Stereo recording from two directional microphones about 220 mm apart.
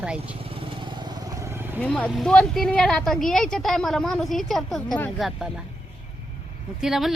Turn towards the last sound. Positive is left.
turn(degrees=0)  # may be behind; listen again after turning